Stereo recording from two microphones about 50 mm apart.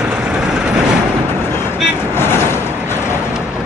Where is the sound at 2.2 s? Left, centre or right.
Left.